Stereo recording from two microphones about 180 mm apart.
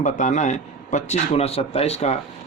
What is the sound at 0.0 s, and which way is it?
A man's voice, 40° left (ahead or behind).